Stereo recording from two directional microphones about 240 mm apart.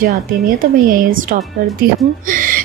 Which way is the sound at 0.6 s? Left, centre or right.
Right.